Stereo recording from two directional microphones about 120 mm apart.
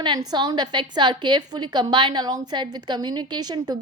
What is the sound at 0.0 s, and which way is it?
A woman's voice, 35° right (ahead or behind).